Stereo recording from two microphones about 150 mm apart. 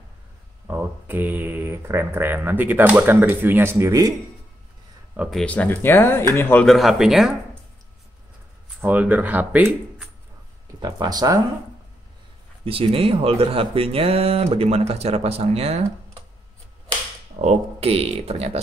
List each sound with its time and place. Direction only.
0.7 s speech: 15° right (ahead or behind)
5.1 s speech: 10° right (ahead or behind)
5.4 s speech: 10° left (ahead or behind)
6.6 s speech: centre (ahead or behind)
8.8 s speech: 10° right (ahead or behind)
10.8 s speech: 25° right (ahead or behind)
12.6 s speech: 40° right (ahead or behind)
17.4 s speech: 45° right (ahead or behind)